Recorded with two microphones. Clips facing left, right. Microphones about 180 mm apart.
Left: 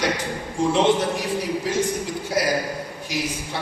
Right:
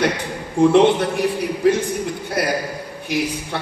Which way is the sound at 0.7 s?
60° right (ahead or behind).